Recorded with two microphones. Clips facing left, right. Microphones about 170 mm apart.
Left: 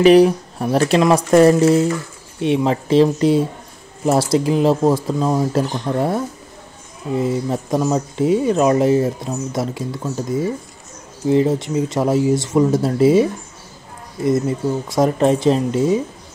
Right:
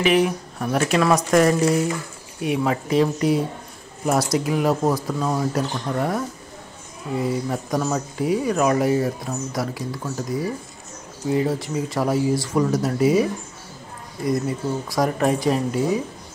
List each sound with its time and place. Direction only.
0.0 s speech: 35° left (ahead or behind)
14.9 s speech: 25° left (ahead or behind)